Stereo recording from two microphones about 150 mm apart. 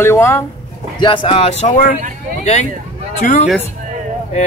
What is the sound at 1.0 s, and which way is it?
Speech, 35° left (ahead or behind).